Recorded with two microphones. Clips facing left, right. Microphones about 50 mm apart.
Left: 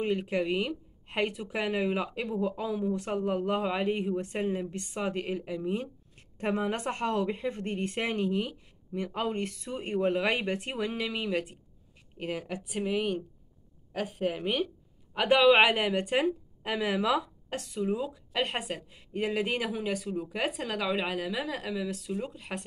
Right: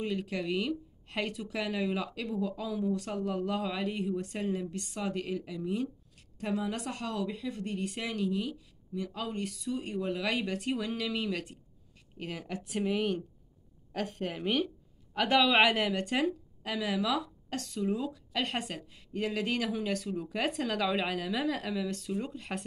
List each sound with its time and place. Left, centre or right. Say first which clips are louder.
0.0 s a woman's voice: left 5 dB; left
17.6 s a woman's voice: left 2 dB; centre